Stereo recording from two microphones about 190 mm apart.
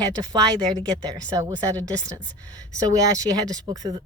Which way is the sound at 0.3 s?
20° right (ahead or behind).